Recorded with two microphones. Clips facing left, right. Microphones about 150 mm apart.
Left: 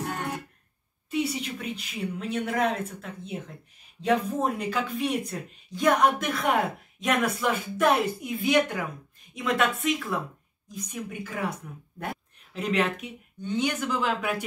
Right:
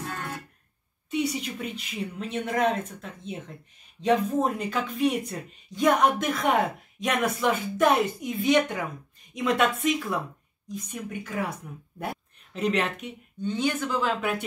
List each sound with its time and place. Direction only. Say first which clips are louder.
0.0 s music: left 3 dB; 20° left (ahead or behind)
1.1 s speech: right 1 dB; centre (ahead or behind)